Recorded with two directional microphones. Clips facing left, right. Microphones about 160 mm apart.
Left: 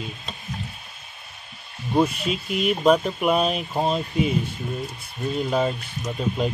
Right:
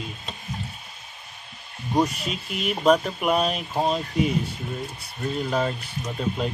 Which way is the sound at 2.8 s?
5° left (ahead or behind).